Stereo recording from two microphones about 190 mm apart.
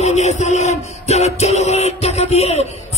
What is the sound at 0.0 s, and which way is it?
Music, 35° left (ahead or behind).